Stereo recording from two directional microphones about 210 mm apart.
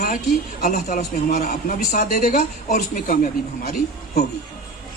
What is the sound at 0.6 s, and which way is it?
Speech, 40° left (ahead or behind).